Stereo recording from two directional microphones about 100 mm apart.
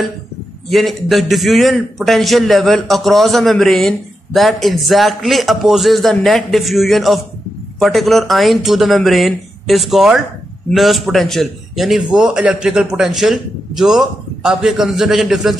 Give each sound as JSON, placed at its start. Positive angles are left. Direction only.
{"t": 0.7, "sound": "a man's voice", "side_deg": 0}